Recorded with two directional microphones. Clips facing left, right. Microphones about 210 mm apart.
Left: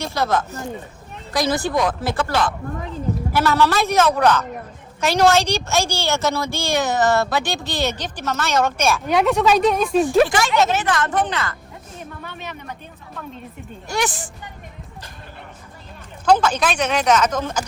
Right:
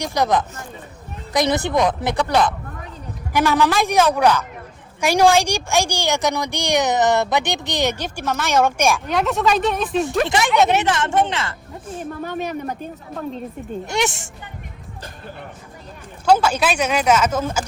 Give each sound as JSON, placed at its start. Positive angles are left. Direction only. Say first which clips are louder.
{"t": 0.0, "sound": "a woman's voice", "louder": "right 2 dB", "side_deg": -15}
{"t": 9.0, "sound": "speech", "louder": "left 3 dB", "side_deg": 0}
{"t": 10.8, "sound": "speech", "louder": "right 2 dB", "side_deg": -25}
{"t": 11.9, "sound": "a sound", "louder": "right 9 dB", "side_deg": -45}
{"t": 13.8, "sound": "speech", "louder": "right 1 dB", "side_deg": -20}
{"t": 16.2, "sound": "a woman's voice", "louder": "right 1 dB", "side_deg": -10}